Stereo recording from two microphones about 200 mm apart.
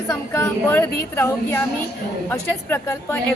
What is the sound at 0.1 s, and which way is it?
Speech, 15° left (ahead or behind).